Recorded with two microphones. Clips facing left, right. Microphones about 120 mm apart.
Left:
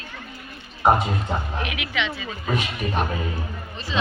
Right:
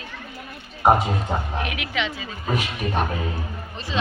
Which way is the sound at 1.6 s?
40° right (ahead or behind).